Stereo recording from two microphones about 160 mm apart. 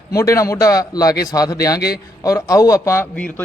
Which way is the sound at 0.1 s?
20° left (ahead or behind).